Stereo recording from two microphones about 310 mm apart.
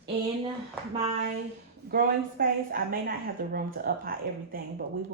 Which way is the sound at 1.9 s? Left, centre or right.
Right.